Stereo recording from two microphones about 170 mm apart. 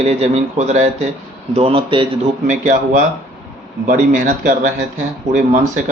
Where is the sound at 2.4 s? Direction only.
50° right (ahead or behind).